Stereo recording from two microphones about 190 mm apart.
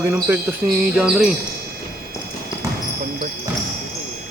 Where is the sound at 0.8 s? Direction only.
5° right (ahead or behind).